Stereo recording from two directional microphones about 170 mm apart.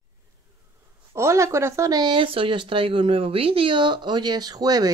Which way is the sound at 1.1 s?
15° right (ahead or behind).